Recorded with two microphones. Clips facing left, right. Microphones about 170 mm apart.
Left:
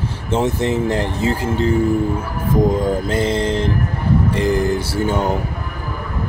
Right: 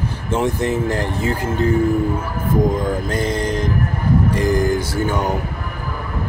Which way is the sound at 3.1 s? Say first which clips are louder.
Left 2 dB; 25° left (ahead or behind).